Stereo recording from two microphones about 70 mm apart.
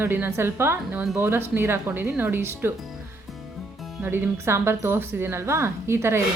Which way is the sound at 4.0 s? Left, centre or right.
Right.